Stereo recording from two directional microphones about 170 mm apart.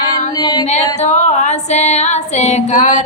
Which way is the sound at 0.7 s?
40° left (ahead or behind).